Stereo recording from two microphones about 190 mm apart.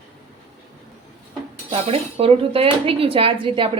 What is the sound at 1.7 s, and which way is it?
Speech, 30° right (ahead or behind).